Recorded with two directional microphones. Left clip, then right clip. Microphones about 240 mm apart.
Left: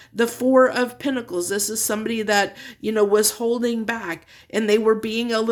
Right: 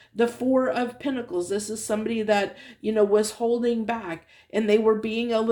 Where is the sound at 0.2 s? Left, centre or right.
Left.